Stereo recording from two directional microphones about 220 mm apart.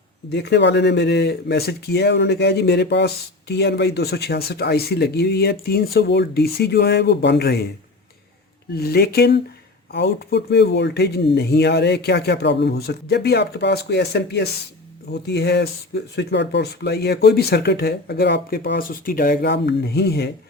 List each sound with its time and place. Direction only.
0.3 s speech: 50° left (ahead or behind)
8.7 s speech: 45° left (ahead or behind)